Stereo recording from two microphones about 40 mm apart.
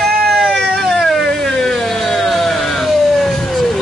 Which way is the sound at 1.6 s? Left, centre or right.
Centre.